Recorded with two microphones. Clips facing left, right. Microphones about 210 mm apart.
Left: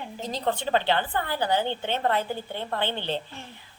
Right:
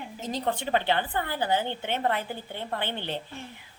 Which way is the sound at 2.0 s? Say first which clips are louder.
Left 4 dB; 15° right (ahead or behind).